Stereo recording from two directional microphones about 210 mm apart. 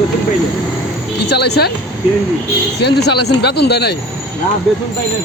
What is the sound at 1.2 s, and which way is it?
Speech, 50° left (ahead or behind).